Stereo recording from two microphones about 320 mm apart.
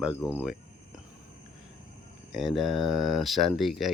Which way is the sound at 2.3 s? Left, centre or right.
Centre.